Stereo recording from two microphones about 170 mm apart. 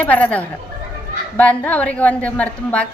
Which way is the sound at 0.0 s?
10° left (ahead or behind).